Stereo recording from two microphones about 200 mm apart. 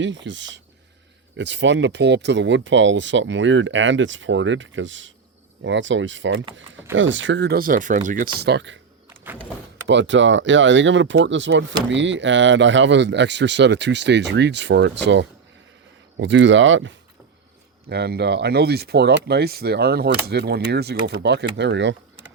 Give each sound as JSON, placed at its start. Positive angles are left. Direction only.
{"t": 0.0, "sound": "speech", "side_deg": -65}
{"t": 8.4, "sound": "speech", "side_deg": -60}
{"t": 9.8, "sound": "speech", "side_deg": -65}
{"t": 17.8, "sound": "speech", "side_deg": -55}